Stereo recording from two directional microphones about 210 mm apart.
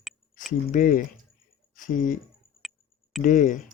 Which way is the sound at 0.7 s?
40° left (ahead or behind).